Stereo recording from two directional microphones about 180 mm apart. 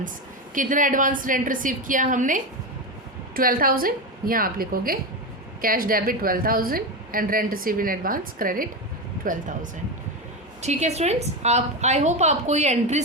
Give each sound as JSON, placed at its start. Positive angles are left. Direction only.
{"t": 0.5, "sound": "a woman's voice", "side_deg": -45}
{"t": 10.6, "sound": "a woman's voice", "side_deg": -40}